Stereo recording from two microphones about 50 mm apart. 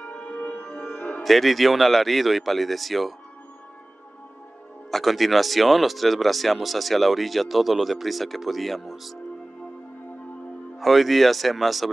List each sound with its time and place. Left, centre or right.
0.0 s music: left
1.2 s speech: centre
4.9 s speech: centre
10.8 s speech: centre